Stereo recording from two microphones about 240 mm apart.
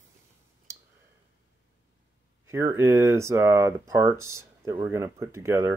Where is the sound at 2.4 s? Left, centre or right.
Centre.